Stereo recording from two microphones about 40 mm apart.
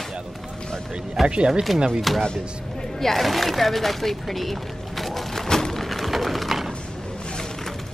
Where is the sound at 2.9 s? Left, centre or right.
Centre.